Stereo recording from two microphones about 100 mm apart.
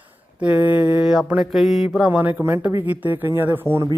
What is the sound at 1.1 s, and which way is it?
Mantra, 10° right (ahead or behind).